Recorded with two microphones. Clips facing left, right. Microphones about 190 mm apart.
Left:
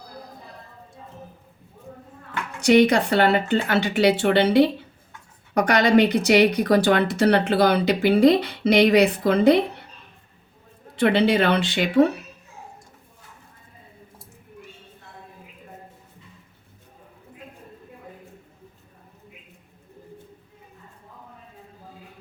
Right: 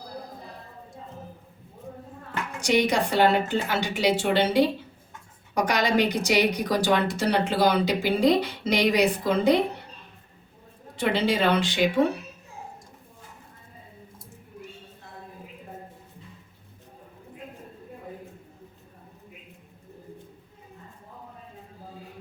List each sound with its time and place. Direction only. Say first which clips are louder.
2.6 s speech: left 7 dB; 60° left (ahead or behind)
10.9 s speech: left 6 dB; 60° left (ahead or behind)